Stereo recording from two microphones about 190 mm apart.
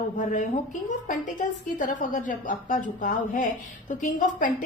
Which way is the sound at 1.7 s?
45° left (ahead or behind).